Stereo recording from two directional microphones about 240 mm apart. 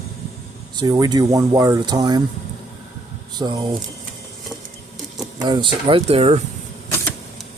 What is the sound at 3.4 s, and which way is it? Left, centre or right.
Speech, centre.